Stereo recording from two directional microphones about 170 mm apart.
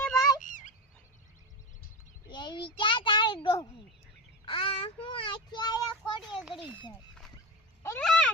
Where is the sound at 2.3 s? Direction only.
25° left (ahead or behind).